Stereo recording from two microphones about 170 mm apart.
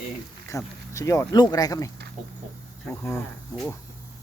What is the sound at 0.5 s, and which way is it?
A man's voice, 20° left (ahead or behind).